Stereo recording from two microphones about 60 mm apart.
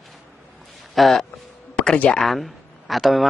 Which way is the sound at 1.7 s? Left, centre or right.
Left.